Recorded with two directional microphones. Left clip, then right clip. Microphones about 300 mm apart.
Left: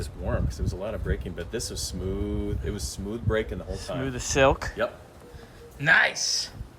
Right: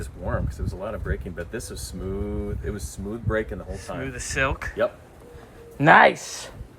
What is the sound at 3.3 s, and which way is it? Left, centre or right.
Speech, centre.